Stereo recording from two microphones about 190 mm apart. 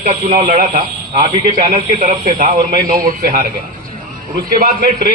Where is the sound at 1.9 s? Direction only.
40° right (ahead or behind).